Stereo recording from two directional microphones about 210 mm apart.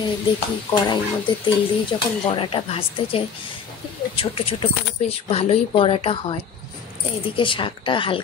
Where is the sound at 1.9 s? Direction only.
25° left (ahead or behind).